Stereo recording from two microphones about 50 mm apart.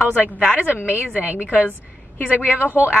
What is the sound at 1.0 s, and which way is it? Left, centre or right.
A woman's voice, right.